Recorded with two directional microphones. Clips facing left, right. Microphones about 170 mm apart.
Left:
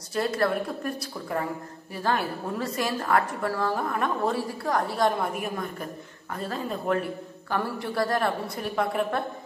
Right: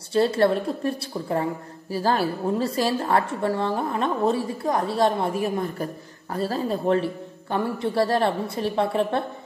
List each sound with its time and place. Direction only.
0.1 s a woman's voice: 30° right (ahead or behind)